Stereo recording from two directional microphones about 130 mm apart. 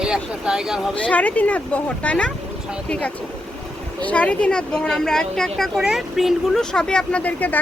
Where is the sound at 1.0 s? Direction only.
10° left (ahead or behind).